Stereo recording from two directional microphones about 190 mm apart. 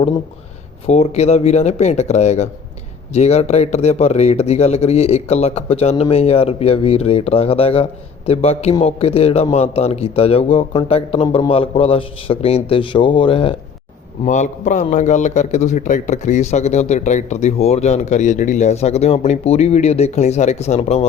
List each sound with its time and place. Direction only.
0.9 s a man's voice: 35° left (ahead or behind)
14.3 s a man's voice: 40° left (ahead or behind)